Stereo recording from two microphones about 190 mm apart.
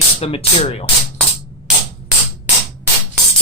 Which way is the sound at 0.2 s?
30° left (ahead or behind).